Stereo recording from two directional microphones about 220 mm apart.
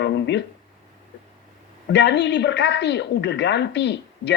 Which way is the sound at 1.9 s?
50° left (ahead or behind).